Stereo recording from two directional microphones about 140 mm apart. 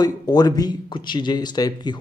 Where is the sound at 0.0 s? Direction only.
30° left (ahead or behind).